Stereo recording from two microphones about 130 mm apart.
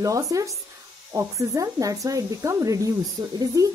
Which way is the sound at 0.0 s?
25° right (ahead or behind).